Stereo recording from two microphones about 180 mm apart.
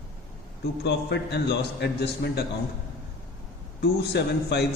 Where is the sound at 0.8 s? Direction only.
70° left (ahead or behind).